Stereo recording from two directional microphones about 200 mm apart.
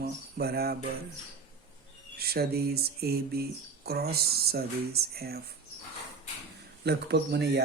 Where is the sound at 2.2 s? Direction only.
50° right (ahead or behind).